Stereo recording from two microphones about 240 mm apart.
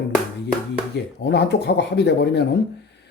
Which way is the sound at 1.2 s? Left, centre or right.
Left.